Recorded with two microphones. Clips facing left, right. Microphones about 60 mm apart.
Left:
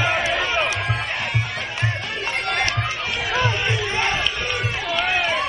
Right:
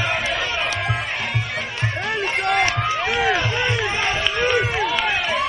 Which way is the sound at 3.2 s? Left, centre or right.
Centre.